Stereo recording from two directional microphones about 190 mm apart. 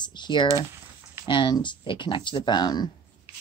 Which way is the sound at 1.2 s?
25° left (ahead or behind).